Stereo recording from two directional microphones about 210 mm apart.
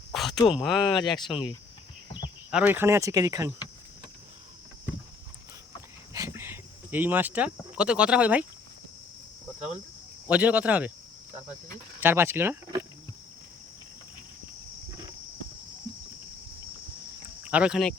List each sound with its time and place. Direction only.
0.1 s a sound: centre (ahead or behind)
0.4 s speech: centre (ahead or behind)
1.3 s speech: 25° left (ahead or behind)
2.1 s speech: 5° right (ahead or behind)
6.1 s cricket: 10° right (ahead or behind)
7.8 s speech: 5° right (ahead or behind)
10.2 s speech: 5° right (ahead or behind)
11.9 s speech: 10° right (ahead or behind)
17.4 s speech: 5° right (ahead or behind)